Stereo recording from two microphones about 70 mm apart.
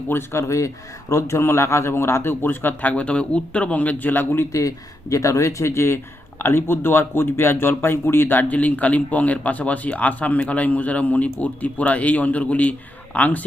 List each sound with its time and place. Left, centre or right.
0.1 s a man's voice: left
4.5 s speech: left